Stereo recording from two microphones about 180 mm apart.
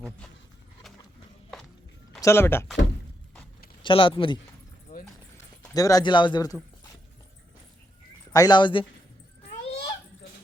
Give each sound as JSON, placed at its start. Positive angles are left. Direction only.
{"t": 2.2, "sound": "speech", "side_deg": 15}
{"t": 3.8, "sound": "a man's voice", "side_deg": 30}
{"t": 4.9, "sound": "a sound", "side_deg": 40}
{"t": 5.7, "sound": "speech", "side_deg": 20}
{"t": 8.3, "sound": "a man's voice", "side_deg": 20}